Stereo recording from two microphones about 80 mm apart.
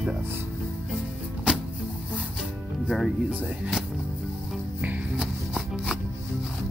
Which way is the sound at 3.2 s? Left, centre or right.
Centre.